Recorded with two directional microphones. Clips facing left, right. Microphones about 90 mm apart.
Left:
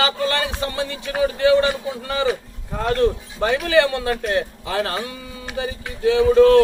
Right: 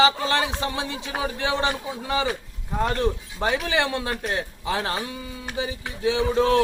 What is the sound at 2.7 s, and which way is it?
Speech, 15° right (ahead or behind).